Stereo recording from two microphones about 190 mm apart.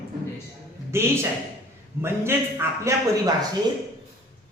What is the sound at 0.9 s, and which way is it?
A man's voice, 15° right (ahead or behind).